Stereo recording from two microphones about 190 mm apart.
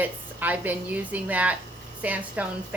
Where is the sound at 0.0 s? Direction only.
10° right (ahead or behind).